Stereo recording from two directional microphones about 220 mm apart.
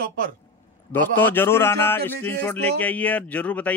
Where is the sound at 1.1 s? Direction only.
10° left (ahead or behind).